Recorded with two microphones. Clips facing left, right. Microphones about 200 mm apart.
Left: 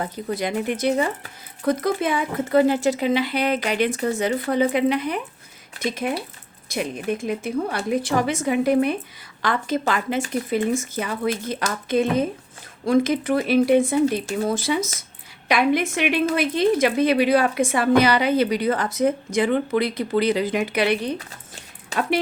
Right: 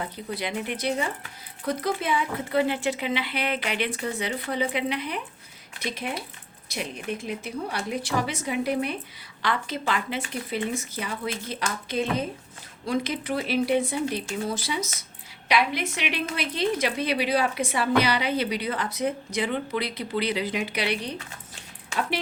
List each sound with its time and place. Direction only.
0.0 s a woman's voice: 45° left (ahead or behind)